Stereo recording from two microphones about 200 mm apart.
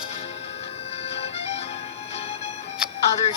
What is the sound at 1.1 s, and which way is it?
Music, 30° left (ahead or behind).